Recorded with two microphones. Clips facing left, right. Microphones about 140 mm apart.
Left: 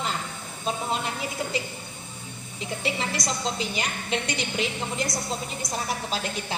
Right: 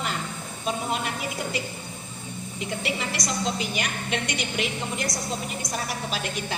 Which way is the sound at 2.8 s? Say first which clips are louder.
Left 3 dB; 25° left (ahead or behind).